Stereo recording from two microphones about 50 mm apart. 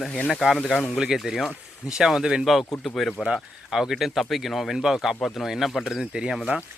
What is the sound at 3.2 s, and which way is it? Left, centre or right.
Speech, centre.